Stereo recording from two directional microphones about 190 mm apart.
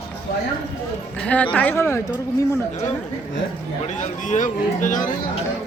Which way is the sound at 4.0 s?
40° left (ahead or behind).